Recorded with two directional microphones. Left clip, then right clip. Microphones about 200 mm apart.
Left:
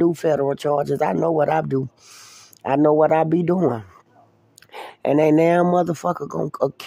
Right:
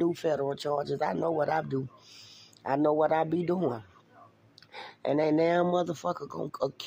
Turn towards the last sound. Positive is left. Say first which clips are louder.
# left 10 dB
turn(degrees=35)  # may be behind; listen again after turning